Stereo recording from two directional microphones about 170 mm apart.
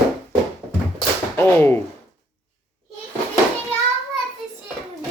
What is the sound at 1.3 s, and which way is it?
Speech, 10° left (ahead or behind).